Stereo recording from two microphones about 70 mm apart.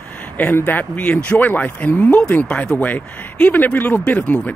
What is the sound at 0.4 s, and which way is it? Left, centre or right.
Speech, left.